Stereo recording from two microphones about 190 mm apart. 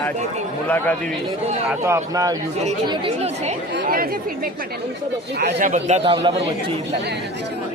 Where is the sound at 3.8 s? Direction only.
50° right (ahead or behind).